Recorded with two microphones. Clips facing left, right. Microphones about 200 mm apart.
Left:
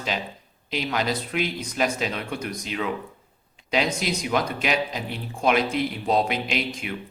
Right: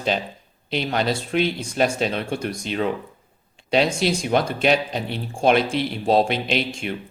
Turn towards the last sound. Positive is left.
turn(degrees=-30)  # may be behind; listen again after turning